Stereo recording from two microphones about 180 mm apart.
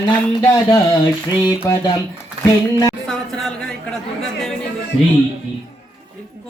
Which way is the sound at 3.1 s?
5° left (ahead or behind).